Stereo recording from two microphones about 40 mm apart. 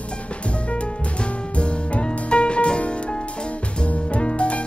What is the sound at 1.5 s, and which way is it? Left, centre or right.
Music, left.